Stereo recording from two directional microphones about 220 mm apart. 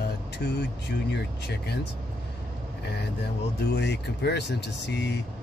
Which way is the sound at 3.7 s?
50° left (ahead or behind).